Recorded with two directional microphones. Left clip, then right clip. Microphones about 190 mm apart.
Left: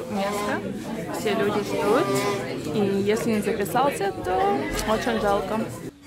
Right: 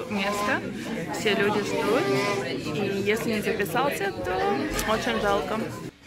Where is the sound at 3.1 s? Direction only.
15° left (ahead or behind).